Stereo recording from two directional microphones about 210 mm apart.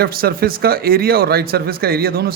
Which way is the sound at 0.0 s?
45° right (ahead or behind).